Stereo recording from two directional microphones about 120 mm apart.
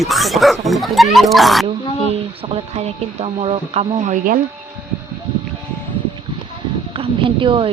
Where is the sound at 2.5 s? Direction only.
60° right (ahead or behind).